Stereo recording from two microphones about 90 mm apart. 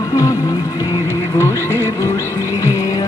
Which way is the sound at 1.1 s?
30° left (ahead or behind).